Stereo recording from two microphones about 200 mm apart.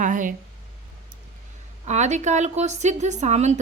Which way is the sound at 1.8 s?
35° right (ahead or behind).